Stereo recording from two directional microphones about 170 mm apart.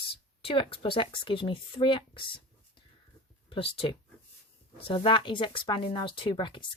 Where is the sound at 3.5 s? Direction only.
30° left (ahead or behind).